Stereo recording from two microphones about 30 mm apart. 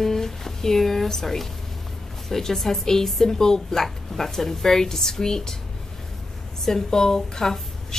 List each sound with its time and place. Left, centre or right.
0.0 s music: centre
2.2 s speech: centre
6.6 s a woman's voice: centre